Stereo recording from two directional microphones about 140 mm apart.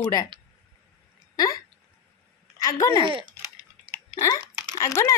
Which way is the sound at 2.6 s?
25° left (ahead or behind).